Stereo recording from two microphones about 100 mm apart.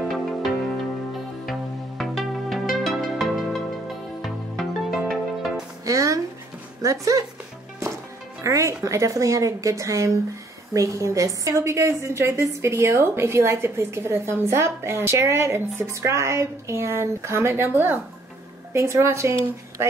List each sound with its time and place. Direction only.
0.0 s music: centre (ahead or behind)
5.9 s music: 35° right (ahead or behind)
6.8 s speech: 35° right (ahead or behind)
8.5 s a woman's voice: 30° right (ahead or behind)